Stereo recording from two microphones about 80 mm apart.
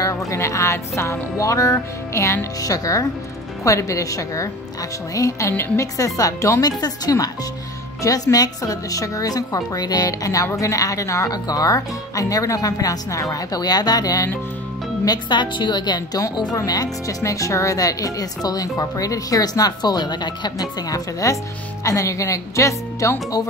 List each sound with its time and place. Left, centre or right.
0.0 s a woman's voice: left
15.0 s a woman's voice: left